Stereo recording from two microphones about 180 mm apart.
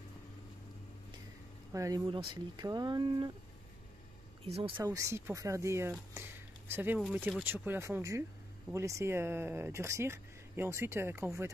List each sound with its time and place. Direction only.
1.7 s speech: 20° right (ahead or behind)
4.5 s speech: 35° right (ahead or behind)
4.7 s speech: 15° right (ahead or behind)